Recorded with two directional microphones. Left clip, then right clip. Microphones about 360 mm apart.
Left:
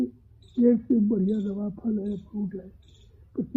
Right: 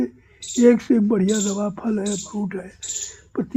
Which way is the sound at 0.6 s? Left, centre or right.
Right.